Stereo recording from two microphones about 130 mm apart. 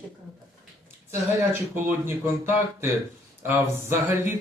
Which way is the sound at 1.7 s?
15° right (ahead or behind).